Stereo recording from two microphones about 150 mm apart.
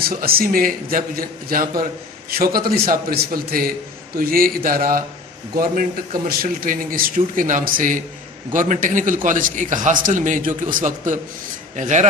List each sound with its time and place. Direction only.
0.0 s a man's voice: 80° right
6.2 s a man's voice: 75° right (ahead or behind); by 12.0 s 55° right (ahead or behind)